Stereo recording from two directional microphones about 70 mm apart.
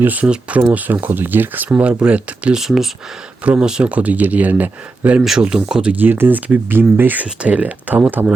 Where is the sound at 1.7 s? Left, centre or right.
Centre.